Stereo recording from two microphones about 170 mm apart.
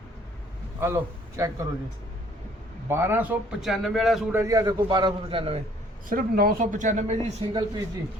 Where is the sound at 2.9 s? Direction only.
15° right (ahead or behind).